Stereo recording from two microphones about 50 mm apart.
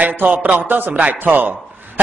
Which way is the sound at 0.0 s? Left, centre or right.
Right.